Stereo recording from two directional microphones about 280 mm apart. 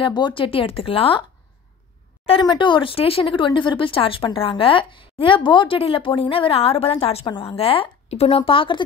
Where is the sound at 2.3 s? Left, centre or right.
Centre.